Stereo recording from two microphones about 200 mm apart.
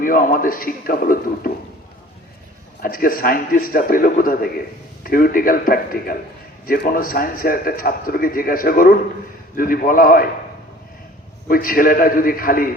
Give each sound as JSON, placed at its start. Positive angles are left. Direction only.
{"t": 0.0, "sound": "a man's voice", "side_deg": 45}
{"t": 2.8, "sound": "a man's voice", "side_deg": 45}
{"t": 11.4, "sound": "a man's voice", "side_deg": 45}